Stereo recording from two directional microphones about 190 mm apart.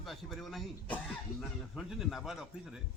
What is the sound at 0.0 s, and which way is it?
Speech, centre (ahead or behind).